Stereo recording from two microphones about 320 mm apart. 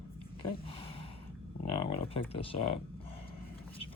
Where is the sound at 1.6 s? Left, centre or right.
Centre.